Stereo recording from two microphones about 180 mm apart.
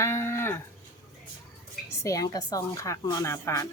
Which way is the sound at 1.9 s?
15° left (ahead or behind).